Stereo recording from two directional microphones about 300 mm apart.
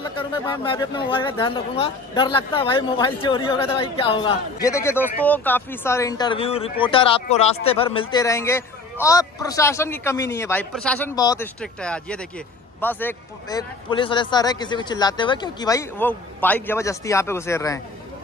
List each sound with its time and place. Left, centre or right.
0.0 s speech: centre